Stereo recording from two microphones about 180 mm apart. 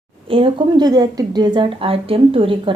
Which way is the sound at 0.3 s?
30° right (ahead or behind).